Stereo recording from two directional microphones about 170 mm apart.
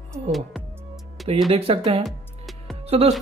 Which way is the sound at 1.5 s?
35° right (ahead or behind).